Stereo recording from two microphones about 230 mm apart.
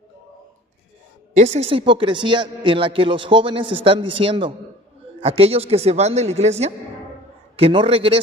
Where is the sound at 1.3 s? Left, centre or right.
Right.